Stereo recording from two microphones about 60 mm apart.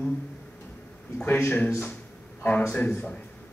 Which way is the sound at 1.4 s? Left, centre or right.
Left.